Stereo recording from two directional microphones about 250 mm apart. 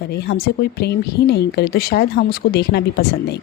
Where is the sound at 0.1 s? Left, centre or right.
Left.